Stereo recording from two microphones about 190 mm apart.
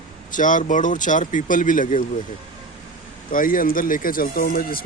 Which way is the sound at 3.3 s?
45° left (ahead or behind).